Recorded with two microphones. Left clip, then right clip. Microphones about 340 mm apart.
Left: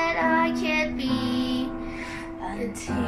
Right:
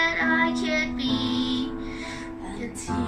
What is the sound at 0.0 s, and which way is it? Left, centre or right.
Child singing, centre.